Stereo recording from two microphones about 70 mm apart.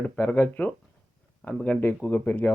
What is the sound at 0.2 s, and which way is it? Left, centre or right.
Speech, left.